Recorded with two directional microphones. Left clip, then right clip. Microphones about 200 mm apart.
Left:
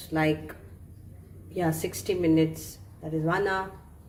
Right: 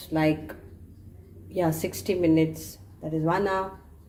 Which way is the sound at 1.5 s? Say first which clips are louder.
Right 2 dB; 25° right (ahead or behind).